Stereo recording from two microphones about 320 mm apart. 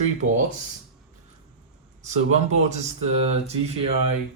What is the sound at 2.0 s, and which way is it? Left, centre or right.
Speech, right.